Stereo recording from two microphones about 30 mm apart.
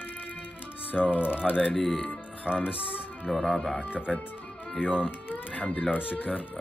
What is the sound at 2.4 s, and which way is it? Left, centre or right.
Speech, right.